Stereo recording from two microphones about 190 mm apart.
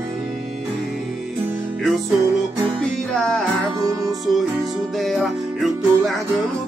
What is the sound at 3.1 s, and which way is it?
Music, 5° left (ahead or behind).